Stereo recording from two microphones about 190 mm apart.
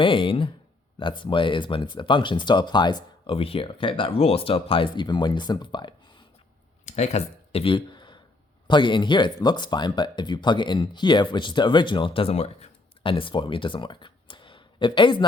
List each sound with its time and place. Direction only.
0.0 s speech: 25° left (ahead or behind)
6.8 s a sound: 35° left (ahead or behind)
8.6 s speech: 25° left (ahead or behind)